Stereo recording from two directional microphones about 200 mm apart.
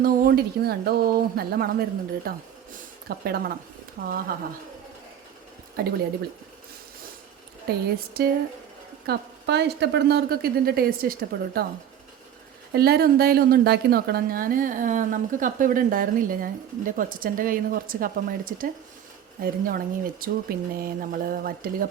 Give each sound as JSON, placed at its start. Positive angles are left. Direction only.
{"t": 0.0, "sound": "a woman's voice", "side_deg": -50}
{"t": 5.8, "sound": "a woman's voice", "side_deg": -45}
{"t": 7.7, "sound": "a woman's voice", "side_deg": -50}
{"t": 12.7, "sound": "a woman's voice", "side_deg": -50}